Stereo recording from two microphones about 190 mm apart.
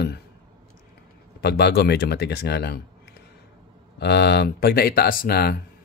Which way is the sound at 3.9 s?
60° left (ahead or behind).